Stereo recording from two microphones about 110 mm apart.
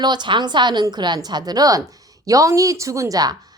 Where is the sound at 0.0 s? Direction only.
45° right (ahead or behind).